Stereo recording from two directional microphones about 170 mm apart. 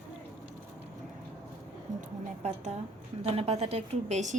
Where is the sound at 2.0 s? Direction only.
45° right (ahead or behind).